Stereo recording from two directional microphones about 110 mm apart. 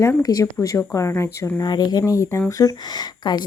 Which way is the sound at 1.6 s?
40° left (ahead or behind).